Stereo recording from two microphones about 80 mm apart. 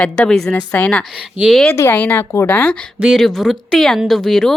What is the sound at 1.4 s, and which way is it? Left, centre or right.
Speech, centre.